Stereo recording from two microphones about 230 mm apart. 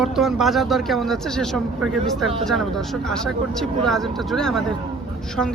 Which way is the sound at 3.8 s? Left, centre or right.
Centre.